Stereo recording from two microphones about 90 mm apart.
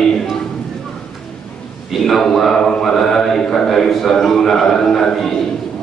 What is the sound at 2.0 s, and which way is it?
A man's voice, centre (ahead or behind).